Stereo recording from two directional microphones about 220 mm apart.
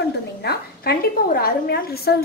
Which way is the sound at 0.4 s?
45° left (ahead or behind).